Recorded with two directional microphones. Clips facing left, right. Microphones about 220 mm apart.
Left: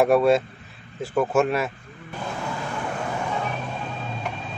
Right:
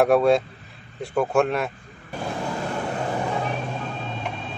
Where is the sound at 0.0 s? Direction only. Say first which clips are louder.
Even; centre (ahead or behind).